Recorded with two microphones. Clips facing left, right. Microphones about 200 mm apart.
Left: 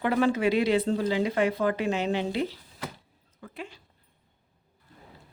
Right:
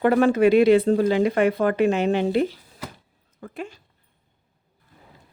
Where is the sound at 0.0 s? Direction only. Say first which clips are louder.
Right 7 dB; 50° right (ahead or behind).